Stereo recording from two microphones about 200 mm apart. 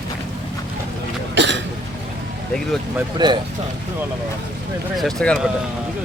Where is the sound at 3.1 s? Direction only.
25° right (ahead or behind).